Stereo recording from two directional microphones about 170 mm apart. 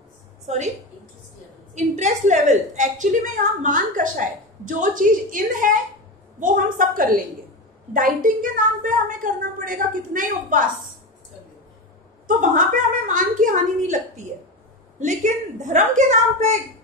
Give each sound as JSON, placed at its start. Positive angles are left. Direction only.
{"t": 0.5, "sound": "a woman's voice", "side_deg": -45}
{"t": 1.8, "sound": "a woman's voice", "side_deg": -45}
{"t": 12.3, "sound": "a woman's voice", "side_deg": -50}